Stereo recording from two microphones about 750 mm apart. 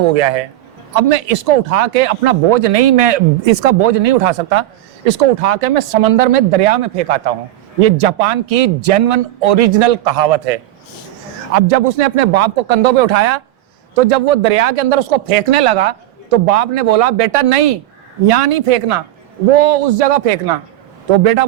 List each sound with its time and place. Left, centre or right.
0.9 s speech: right
11.5 s speech: right